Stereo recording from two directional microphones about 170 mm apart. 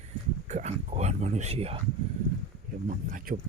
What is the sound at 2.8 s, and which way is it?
Speech, 50° right (ahead or behind).